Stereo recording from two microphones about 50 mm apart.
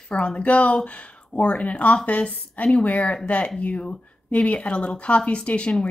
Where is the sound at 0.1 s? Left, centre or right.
Left.